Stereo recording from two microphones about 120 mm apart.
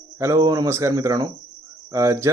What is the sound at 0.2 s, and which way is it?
Speech, 25° right (ahead or behind).